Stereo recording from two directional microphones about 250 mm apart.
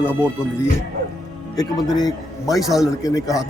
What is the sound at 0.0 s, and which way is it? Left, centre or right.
Speech, centre.